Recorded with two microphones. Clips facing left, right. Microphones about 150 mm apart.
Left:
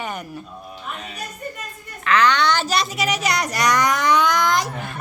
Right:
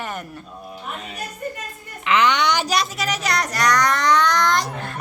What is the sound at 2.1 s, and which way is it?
Speech, 20° right (ahead or behind).